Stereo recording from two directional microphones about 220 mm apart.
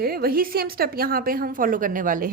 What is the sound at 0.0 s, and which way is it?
A woman's voice, 45° right (ahead or behind).